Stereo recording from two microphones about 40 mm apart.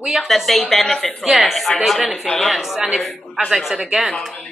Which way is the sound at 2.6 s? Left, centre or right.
Centre.